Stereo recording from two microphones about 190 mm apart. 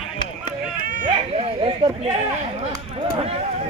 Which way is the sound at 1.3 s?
30° right (ahead or behind).